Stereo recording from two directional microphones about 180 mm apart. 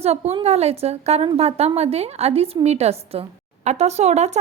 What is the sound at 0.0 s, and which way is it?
A woman's voice, 35° right (ahead or behind).